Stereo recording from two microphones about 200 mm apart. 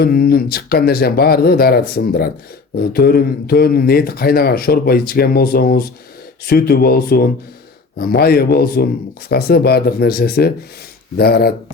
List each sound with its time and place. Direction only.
0.0 s a man's voice: 50° left (ahead or behind)